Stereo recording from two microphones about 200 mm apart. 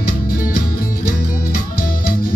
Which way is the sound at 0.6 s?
45° left (ahead or behind).